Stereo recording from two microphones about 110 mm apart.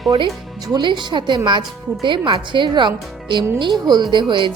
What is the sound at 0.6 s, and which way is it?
A woman's voice, 40° right (ahead or behind).